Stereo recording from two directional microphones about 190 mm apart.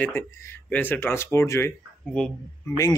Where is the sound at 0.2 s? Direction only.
10° left (ahead or behind).